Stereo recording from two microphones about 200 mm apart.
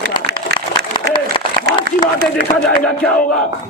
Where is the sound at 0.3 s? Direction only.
55° right (ahead or behind).